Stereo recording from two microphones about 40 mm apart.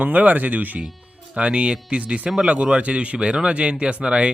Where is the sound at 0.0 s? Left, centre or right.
Right.